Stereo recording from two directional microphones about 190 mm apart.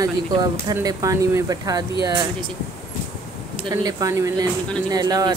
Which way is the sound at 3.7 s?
20° right (ahead or behind).